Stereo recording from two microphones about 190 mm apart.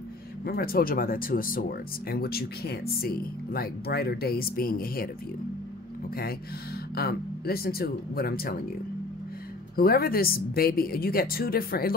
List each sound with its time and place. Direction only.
0.5 s speech: 50° left (ahead or behind)
9.8 s speech: 50° left (ahead or behind)